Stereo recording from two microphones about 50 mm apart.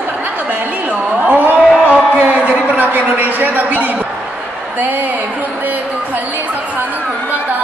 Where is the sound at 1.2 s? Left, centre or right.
Right.